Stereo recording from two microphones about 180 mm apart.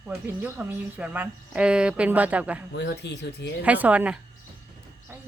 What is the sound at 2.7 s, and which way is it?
Speech, 70° left (ahead or behind).